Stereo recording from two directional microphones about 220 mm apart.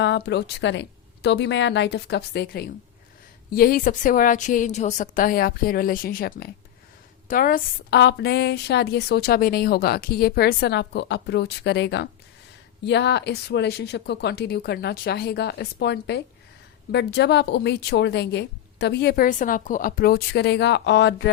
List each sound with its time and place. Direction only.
0.0 s a woman's voice: 55° left (ahead or behind)